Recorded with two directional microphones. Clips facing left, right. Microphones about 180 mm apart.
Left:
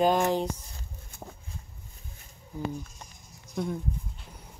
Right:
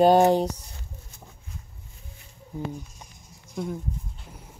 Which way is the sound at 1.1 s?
55° left (ahead or behind).